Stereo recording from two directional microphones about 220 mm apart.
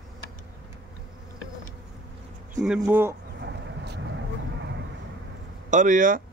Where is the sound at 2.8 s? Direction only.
10° right (ahead or behind).